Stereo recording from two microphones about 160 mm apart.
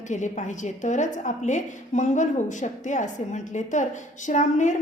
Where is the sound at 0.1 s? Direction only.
50° left (ahead or behind).